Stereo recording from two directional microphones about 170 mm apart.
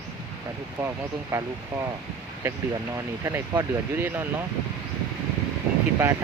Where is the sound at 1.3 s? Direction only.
15° right (ahead or behind).